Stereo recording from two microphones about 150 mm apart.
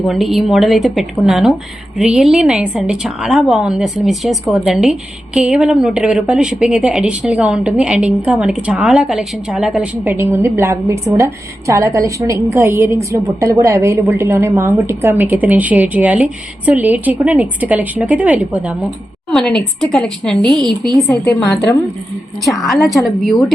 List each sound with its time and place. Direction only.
0.0 s a woman's voice: centre (ahead or behind)
10.0 s a woman's voice: 15° right (ahead or behind); by 21.3 s 5° left (ahead or behind)
22.7 s a woman's voice: 20° left (ahead or behind)
23.0 s a woman's voice: centre (ahead or behind)